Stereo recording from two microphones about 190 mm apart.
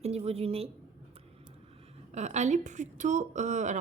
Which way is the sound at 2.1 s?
35° right (ahead or behind).